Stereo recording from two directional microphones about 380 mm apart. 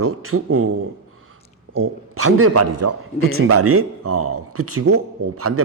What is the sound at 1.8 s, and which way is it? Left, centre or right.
Speech, right.